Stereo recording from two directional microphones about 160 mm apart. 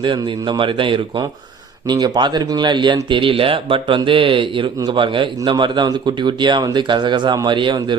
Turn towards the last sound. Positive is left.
turn(degrees=-30)  # may be behind; listen again after turning